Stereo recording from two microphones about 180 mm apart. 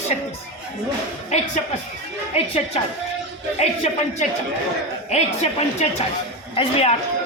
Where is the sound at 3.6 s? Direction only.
35° left (ahead or behind).